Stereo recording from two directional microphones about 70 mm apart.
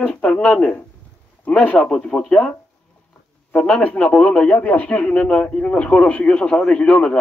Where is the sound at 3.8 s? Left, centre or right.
Centre.